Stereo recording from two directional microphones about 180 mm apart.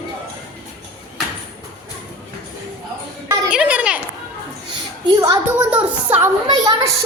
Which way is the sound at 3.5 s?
5° right (ahead or behind).